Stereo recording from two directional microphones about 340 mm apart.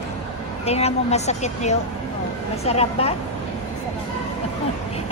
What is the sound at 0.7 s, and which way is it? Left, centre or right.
A woman's voice, centre.